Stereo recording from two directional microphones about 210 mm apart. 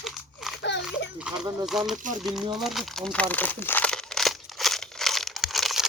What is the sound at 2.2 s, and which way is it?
Speech, centre (ahead or behind).